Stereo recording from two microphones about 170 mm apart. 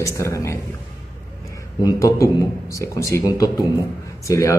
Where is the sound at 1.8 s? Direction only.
20° left (ahead or behind).